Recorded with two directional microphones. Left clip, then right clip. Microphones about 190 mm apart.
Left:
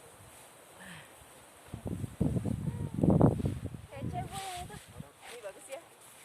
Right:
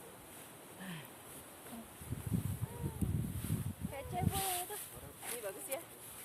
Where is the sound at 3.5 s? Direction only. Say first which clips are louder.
Left 4 dB; 55° right (ahead or behind).